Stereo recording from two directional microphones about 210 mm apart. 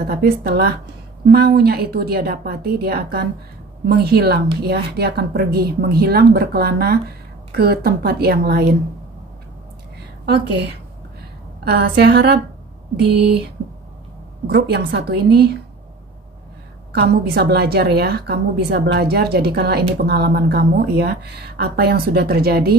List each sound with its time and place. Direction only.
0.0 s a woman's voice: 45° right (ahead or behind)
11.6 s a woman's voice: 50° right (ahead or behind)
14.5 s a woman's voice: 50° right (ahead or behind)
16.9 s a woman's voice: 50° right (ahead or behind)